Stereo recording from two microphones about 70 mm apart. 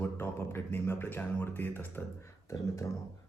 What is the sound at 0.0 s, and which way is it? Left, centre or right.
Speech, left.